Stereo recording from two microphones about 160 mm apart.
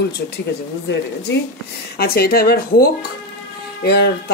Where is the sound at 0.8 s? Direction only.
90° left.